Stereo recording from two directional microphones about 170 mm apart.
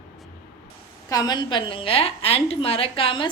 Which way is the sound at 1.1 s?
25° left (ahead or behind).